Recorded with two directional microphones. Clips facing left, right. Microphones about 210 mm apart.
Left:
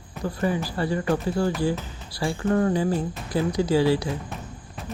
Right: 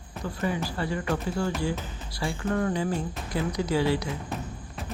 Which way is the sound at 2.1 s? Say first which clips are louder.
Left 5 dB; 35° left (ahead or behind).